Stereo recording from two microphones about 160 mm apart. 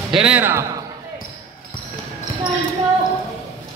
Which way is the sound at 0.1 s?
5° right (ahead or behind).